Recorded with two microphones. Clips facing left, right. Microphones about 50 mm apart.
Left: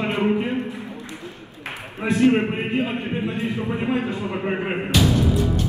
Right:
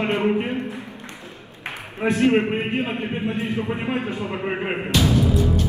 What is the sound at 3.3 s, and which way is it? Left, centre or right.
Speech, right.